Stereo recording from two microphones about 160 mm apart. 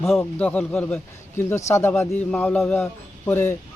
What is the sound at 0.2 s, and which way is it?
A man's voice, 10° left (ahead or behind).